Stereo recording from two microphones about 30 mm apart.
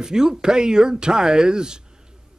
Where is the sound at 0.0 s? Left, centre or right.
Right.